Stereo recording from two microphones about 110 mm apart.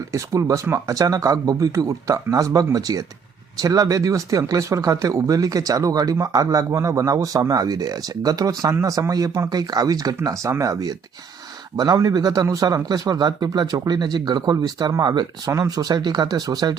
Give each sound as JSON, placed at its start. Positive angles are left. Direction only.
{"t": 0.1, "sound": "speech", "side_deg": -30}